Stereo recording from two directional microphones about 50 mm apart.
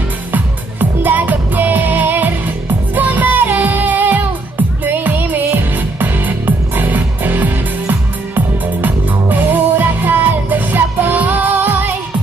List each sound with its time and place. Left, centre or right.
0.3 s music: right